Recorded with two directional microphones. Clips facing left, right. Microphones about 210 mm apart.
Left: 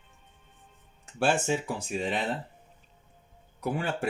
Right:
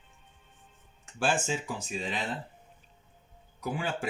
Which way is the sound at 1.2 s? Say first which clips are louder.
Left 3 dB; 65° left (ahead or behind).